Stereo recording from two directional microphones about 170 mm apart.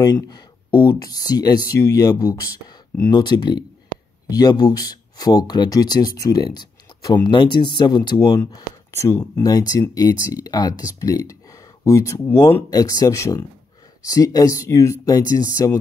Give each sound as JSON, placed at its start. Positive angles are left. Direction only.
{"t": 0.0, "sound": "speech", "side_deg": 25}
{"t": 6.9, "sound": "a sound", "side_deg": 30}
{"t": 7.2, "sound": "speech", "side_deg": 25}